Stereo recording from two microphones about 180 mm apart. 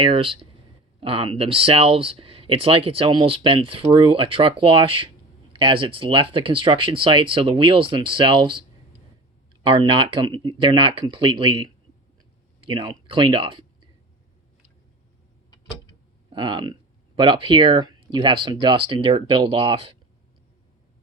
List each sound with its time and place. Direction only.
0.0 s speech: 30° right (ahead or behind)
9.6 s speech: 30° right (ahead or behind)
16.3 s speech: 25° right (ahead or behind)